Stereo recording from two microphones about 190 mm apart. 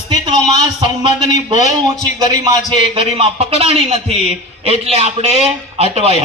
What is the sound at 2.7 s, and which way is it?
A man's voice, 25° right (ahead or behind).